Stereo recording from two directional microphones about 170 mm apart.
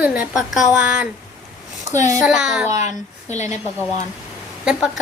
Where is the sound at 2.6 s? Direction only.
45° left (ahead or behind).